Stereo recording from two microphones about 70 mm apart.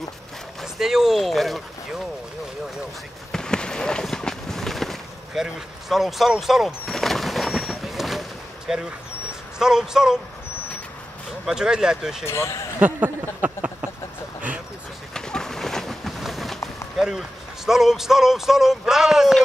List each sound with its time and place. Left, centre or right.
0.6 s speech: centre
3.3 s a sound: centre
9.6 s speech: centre
11.4 s speech: centre
12.3 s speech: left
12.8 s speech: right
15.1 s a sound: centre
17.6 s speech: centre